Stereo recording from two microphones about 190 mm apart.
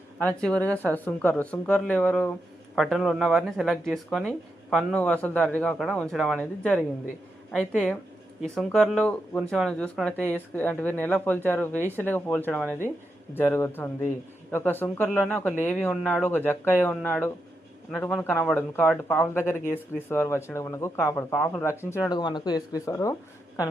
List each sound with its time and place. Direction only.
0.2 s speech: 10° left (ahead or behind)